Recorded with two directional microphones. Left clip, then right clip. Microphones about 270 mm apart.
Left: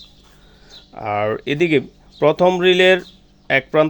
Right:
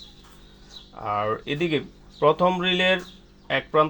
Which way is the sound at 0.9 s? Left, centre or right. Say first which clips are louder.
Left 5 dB; left.